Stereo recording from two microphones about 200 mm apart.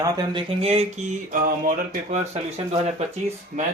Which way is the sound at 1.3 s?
45° right (ahead or behind).